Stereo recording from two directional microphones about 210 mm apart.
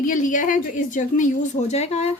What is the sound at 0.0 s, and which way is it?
A woman's voice, 40° left (ahead or behind).